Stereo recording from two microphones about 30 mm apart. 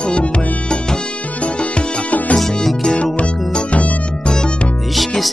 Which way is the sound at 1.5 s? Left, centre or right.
Left.